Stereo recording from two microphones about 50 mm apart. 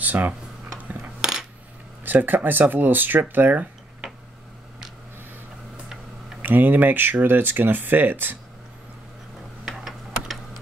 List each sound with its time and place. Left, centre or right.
0.0 s a sound: right
0.7 s coin: right
2.0 s speech: right
6.4 s speech: right
9.7 s tick-tock: centre